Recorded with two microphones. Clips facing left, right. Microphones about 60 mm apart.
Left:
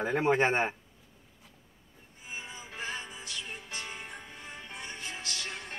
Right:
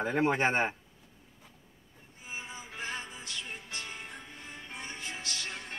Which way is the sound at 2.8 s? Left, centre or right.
Centre.